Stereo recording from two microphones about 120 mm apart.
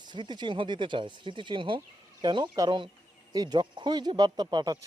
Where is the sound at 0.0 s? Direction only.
40° right (ahead or behind).